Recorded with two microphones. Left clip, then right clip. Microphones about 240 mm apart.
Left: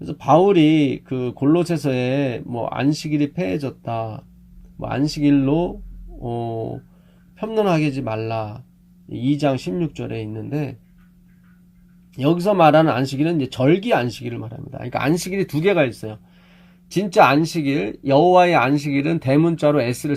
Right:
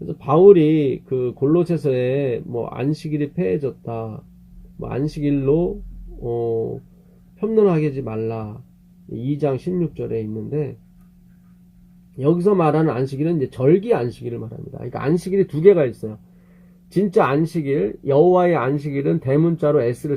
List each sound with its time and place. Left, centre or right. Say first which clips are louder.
0.1 s speech: right 3 dB; left
12.1 s speech: even; left